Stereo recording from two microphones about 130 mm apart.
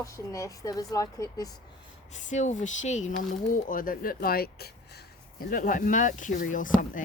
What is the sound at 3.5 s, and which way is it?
Speech, 90° left.